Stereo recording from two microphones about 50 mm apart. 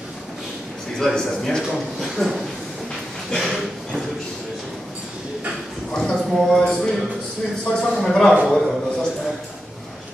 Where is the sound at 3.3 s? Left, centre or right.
Centre.